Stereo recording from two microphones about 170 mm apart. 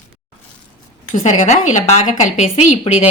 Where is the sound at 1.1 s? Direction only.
45° left (ahead or behind).